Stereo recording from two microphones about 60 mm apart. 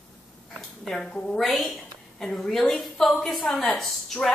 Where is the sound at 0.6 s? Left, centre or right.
Centre.